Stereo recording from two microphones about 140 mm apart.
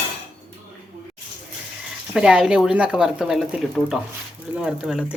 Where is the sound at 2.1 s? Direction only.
5° right (ahead or behind).